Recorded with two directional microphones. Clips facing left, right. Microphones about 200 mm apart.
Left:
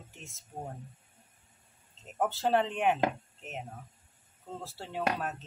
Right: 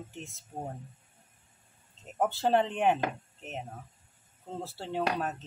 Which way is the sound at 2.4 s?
20° right (ahead or behind).